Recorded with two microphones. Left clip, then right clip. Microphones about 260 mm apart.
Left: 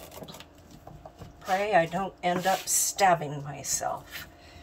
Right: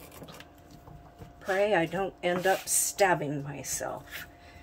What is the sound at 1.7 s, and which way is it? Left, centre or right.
A woman's voice, right.